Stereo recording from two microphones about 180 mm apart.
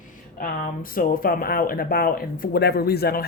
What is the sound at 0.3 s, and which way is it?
Speech, 50° left (ahead or behind).